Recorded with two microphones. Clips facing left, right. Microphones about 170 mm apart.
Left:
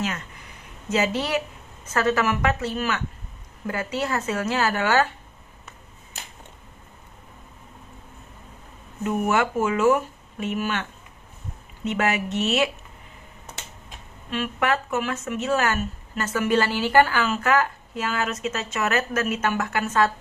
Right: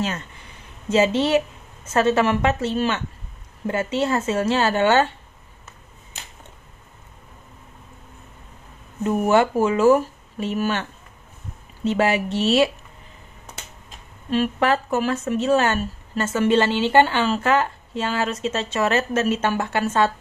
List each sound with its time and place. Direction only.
0.8 s speech: 30° right (ahead or behind)
9.0 s speech: 30° right (ahead or behind)
14.3 s speech: 35° right (ahead or behind)